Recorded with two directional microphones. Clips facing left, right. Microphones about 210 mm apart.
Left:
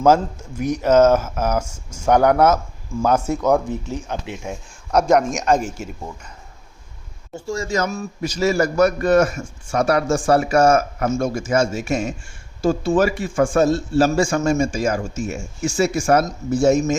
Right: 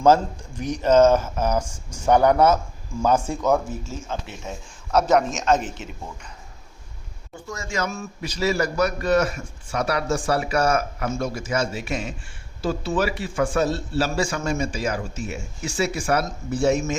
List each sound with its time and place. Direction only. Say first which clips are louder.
0.5 s speech: left 2 dB; 10° left (ahead or behind)
7.4 s a man's voice: left 6 dB; 30° left (ahead or behind)